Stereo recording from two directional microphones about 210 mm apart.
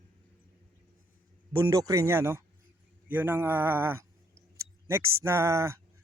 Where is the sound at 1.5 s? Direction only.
15° right (ahead or behind).